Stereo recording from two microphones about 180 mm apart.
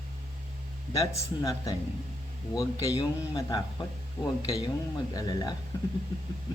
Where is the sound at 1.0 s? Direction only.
20° left (ahead or behind).